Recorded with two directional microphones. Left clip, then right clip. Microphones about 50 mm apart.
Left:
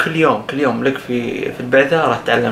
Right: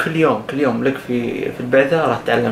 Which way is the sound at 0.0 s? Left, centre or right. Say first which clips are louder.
Left 2 dB; centre.